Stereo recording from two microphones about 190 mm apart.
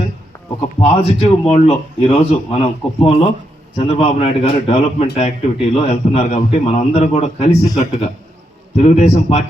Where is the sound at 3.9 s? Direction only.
35° left (ahead or behind).